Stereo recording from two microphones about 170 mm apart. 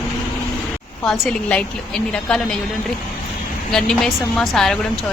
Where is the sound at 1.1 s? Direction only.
5° left (ahead or behind).